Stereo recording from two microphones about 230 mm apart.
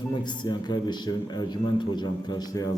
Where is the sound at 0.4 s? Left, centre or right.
Centre.